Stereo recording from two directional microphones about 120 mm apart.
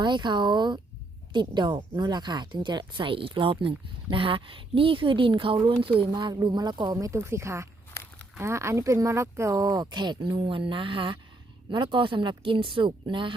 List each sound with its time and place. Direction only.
0.0 s speech: 40° right (ahead or behind)